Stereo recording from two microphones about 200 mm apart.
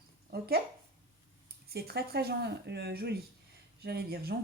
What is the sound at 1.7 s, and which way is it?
A woman's voice, 50° right (ahead or behind).